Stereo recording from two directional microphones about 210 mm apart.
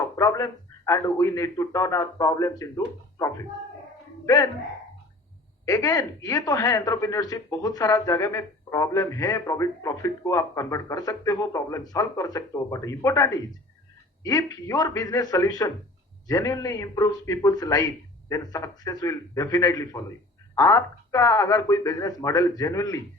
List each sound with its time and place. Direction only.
0.2 s speech: 15° left (ahead or behind)
5.6 s speech: 15° left (ahead or behind)